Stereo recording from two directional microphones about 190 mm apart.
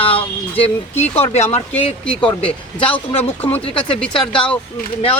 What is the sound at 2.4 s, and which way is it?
Speech, 5° left (ahead or behind).